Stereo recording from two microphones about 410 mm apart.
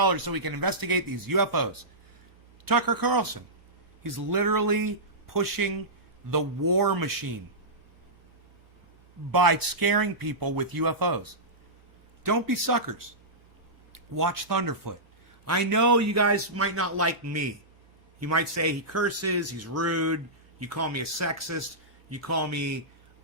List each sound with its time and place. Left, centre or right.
0.0 s speech: right
9.3 s speech: right